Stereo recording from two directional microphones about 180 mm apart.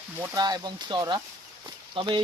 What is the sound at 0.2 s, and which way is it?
Speech, 20° right (ahead or behind).